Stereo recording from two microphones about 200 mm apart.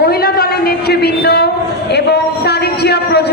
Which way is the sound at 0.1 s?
50° left (ahead or behind).